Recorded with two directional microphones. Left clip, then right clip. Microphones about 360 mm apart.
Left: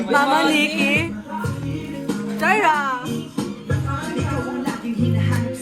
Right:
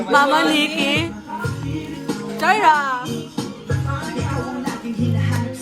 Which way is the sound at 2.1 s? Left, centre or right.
Centre.